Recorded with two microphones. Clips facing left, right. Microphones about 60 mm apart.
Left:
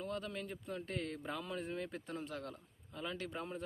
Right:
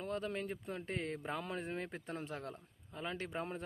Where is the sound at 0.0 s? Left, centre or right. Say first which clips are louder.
Right 3 dB; right.